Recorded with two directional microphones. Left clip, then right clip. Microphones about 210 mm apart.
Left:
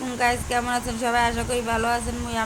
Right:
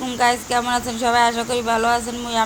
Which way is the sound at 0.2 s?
15° right (ahead or behind).